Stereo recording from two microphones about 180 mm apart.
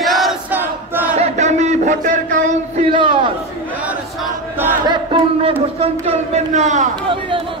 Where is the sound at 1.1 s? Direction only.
40° right (ahead or behind).